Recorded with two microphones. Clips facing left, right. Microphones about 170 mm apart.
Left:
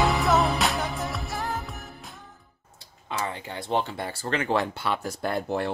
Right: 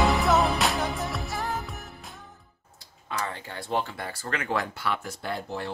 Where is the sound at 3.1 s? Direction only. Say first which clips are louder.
Left 2 dB; 20° left (ahead or behind).